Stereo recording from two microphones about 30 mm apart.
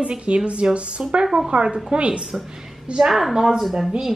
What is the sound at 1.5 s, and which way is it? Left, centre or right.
Speech, right.